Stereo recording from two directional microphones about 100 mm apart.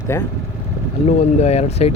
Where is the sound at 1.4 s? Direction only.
90° left.